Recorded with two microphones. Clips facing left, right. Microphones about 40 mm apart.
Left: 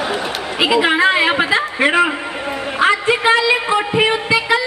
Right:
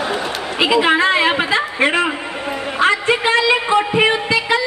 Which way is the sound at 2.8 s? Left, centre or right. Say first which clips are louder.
Left 1 dB; centre.